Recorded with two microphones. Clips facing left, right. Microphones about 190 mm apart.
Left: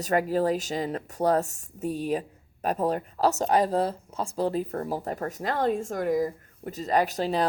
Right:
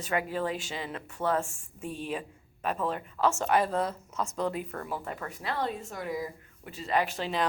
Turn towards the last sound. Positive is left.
turn(degrees=40)  # may be behind; listen again after turning